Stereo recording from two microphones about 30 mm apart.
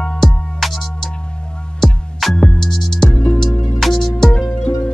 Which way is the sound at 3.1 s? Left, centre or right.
Left.